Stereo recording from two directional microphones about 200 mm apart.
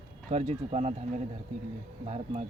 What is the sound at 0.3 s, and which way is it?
Speech, 30° right (ahead or behind).